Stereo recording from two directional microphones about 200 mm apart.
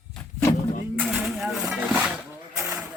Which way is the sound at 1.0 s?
5° right (ahead or behind).